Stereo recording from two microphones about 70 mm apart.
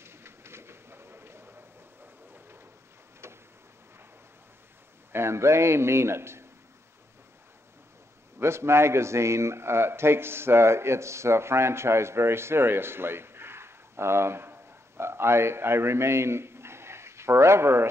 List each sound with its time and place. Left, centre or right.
0.0 s a sound: right
5.1 s a man's voice: right
8.4 s a man's voice: right